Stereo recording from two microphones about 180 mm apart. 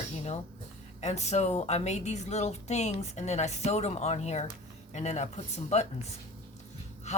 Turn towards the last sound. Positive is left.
turn(degrees=40)  # may be behind; listen again after turning